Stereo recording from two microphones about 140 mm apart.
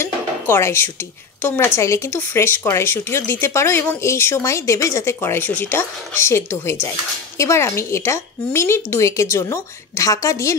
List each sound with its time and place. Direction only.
0.0 s speech: 20° left (ahead or behind)